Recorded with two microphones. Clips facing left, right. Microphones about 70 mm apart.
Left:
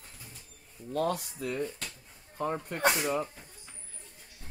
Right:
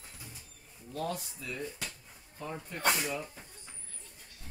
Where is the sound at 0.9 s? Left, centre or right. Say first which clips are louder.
Left 6 dB; left.